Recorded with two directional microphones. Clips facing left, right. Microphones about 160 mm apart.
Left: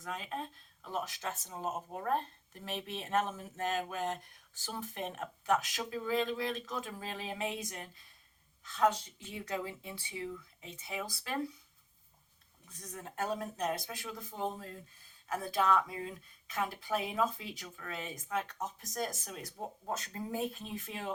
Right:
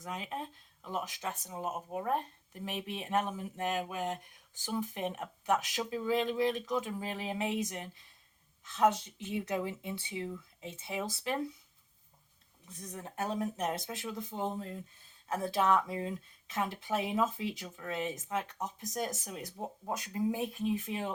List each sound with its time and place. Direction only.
0.0 s speech: 15° right (ahead or behind)
13.0 s speech: 20° right (ahead or behind)